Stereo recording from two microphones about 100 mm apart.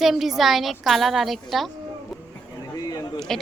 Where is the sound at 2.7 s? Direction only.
40° left (ahead or behind).